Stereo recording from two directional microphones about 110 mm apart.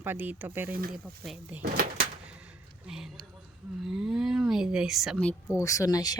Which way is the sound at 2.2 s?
10° right (ahead or behind).